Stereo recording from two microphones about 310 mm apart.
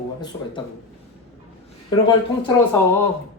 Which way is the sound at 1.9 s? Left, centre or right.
Centre.